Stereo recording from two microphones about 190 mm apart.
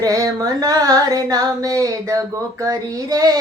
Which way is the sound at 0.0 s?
20° right (ahead or behind).